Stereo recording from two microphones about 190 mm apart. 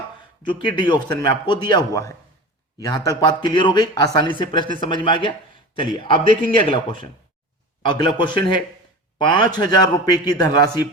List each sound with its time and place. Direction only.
0.7 s a man's voice: 20° left (ahead or behind)